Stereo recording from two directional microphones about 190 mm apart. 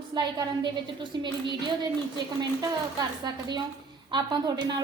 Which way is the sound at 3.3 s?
20° right (ahead or behind).